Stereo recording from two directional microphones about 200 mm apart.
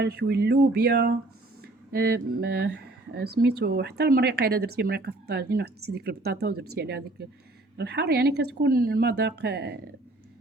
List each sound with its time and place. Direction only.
0.0 s speech: 55° right (ahead or behind)